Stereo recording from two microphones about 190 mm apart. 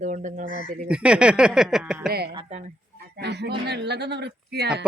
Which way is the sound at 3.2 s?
60° right (ahead or behind).